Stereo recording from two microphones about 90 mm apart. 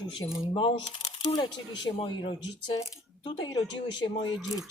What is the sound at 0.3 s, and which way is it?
Speech, 35° left (ahead or behind).